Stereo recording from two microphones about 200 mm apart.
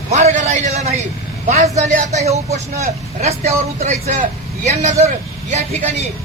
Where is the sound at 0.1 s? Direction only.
35° right (ahead or behind).